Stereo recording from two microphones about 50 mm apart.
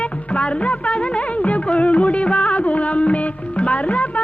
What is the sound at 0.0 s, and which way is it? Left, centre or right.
Music of bollywood, left.